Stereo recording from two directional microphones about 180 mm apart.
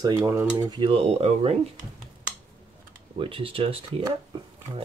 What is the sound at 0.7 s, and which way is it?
Speech, 30° right (ahead or behind).